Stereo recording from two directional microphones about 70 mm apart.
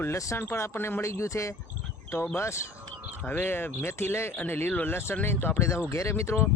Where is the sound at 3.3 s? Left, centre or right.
Left.